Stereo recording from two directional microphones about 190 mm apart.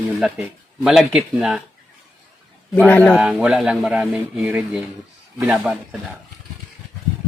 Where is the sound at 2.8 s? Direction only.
10° left (ahead or behind).